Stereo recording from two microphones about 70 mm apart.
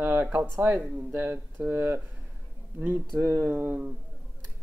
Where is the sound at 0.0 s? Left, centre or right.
Right.